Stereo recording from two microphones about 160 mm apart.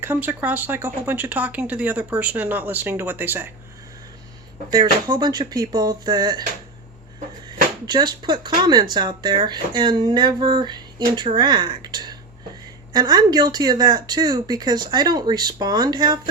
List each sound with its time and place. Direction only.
0.0 s speech: 10° right (ahead or behind)
4.7 s speech: 25° right (ahead or behind)
7.9 s speech: 25° right (ahead or behind)